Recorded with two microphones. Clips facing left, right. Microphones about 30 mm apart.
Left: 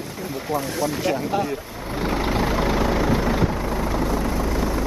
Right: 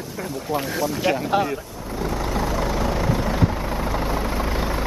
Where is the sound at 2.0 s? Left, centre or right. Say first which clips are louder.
Left 2 dB; left; by 3.7 s centre.